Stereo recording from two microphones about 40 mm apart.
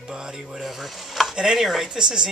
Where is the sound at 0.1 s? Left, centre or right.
Centre.